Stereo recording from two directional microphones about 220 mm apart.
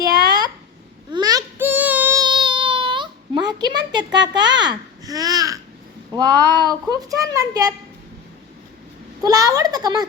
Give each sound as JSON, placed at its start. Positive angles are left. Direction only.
{"t": 0.0, "sound": "a sound", "side_deg": -15}
{"t": 6.1, "sound": "a child's voice", "side_deg": -15}
{"t": 9.2, "sound": "a child's voice", "side_deg": -15}